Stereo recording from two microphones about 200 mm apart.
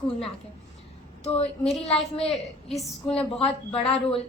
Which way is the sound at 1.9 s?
Centre (ahead or behind).